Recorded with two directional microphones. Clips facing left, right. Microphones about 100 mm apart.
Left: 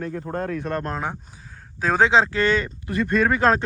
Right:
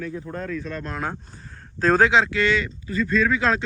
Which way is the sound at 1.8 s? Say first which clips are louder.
Right 3 dB; 10° left (ahead or behind).